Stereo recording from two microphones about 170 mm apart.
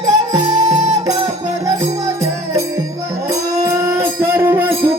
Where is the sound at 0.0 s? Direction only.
20° right (ahead or behind).